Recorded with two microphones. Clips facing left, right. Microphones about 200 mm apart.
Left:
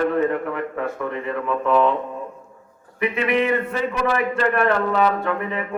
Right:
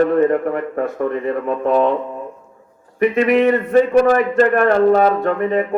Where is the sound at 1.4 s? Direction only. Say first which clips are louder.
Right 2 dB; 40° right (ahead or behind).